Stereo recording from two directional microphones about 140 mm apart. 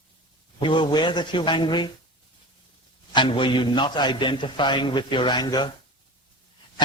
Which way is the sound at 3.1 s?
35° left (ahead or behind).